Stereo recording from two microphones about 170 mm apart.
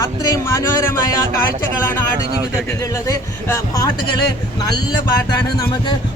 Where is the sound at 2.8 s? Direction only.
20° left (ahead or behind).